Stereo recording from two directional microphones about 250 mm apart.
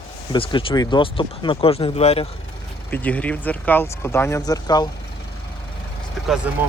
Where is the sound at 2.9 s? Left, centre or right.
Centre.